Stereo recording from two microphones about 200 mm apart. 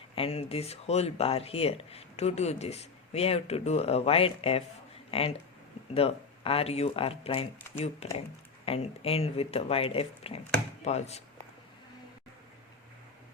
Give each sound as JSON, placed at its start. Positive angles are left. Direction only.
{"t": 0.2, "sound": "speech", "side_deg": 30}